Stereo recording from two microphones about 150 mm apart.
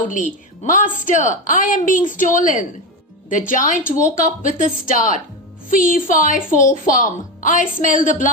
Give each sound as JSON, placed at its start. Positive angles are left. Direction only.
{"t": 0.1, "sound": "a woman's voice", "side_deg": 60}